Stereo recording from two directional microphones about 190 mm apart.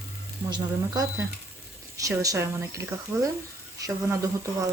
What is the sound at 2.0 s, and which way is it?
A woman's voice, 15° right (ahead or behind).